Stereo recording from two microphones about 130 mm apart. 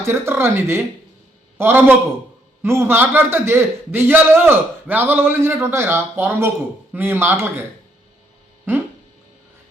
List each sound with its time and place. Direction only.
0.0 s a man's voice: 20° right (ahead or behind)
8.7 s a man's voice: 15° right (ahead or behind)